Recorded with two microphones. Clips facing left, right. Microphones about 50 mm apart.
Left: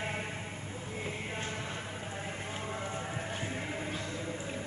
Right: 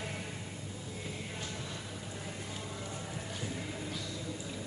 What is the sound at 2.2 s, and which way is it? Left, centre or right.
Music, left.